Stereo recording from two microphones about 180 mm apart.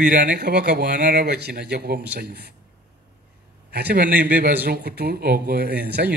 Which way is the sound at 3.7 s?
65° right (ahead or behind).